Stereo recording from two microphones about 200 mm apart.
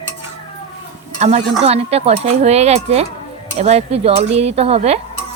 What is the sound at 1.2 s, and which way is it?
Speech, 30° right (ahead or behind).